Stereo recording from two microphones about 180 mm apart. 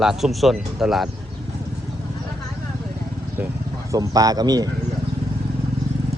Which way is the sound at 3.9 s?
20° right (ahead or behind).